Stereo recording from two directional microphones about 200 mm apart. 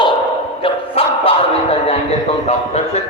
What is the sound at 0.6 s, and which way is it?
Bow-wow, 30° left (ahead or behind).